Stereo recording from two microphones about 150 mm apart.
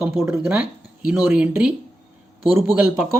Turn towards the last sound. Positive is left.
turn(degrees=-10)  # may be behind; listen again after turning